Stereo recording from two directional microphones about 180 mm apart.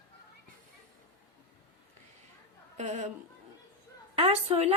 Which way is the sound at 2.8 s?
40° right (ahead or behind).